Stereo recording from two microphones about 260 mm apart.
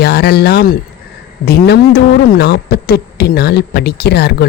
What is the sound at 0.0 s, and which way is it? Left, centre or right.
Speech, left.